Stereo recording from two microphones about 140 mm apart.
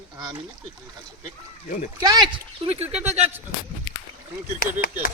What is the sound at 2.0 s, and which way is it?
Speech, 30° right (ahead or behind).